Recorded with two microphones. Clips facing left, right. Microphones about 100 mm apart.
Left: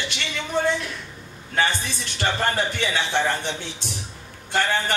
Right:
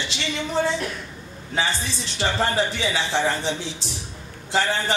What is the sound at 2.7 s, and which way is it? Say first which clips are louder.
Speech: even; 55° left (ahead or behind).